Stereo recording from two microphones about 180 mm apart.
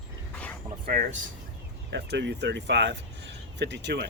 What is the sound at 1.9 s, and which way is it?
Speech, 70° right (ahead or behind).